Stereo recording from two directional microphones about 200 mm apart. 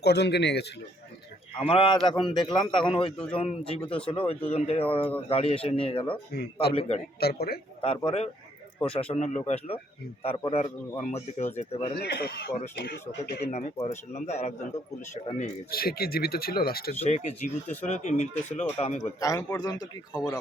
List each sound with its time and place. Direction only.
0.0 s a man's voice: 55° left (ahead or behind)
1.6 s speech: 25° left (ahead or behind)
6.3 s speech: 50° left (ahead or behind)
6.7 s a man's voice: 30° left (ahead or behind)
7.2 s speech: 50° left (ahead or behind)
7.8 s a man's voice: 30° left (ahead or behind)
11.9 s speech: 55° left (ahead or behind)
13.4 s a man's voice: 35° left (ahead or behind)
16.9 s a man's voice: 35° left (ahead or behind)
19.0 s speech: 15° left (ahead or behind)